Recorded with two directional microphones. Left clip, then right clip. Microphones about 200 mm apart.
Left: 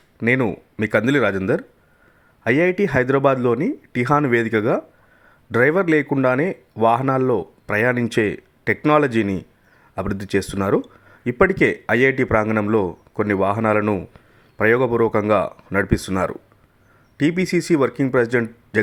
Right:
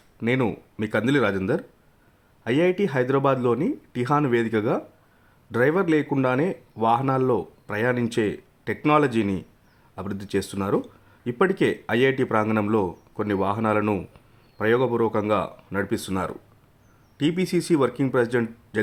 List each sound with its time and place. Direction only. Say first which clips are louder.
0.2 s speech: left 5 dB; 20° left (ahead or behind)